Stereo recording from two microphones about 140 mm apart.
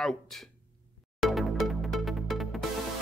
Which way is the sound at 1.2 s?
Centre (ahead or behind).